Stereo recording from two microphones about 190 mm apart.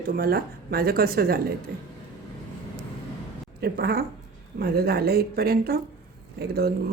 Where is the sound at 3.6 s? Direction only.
55° right (ahead or behind).